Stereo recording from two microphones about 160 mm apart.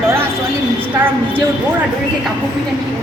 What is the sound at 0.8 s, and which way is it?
Speech, 15° right (ahead or behind).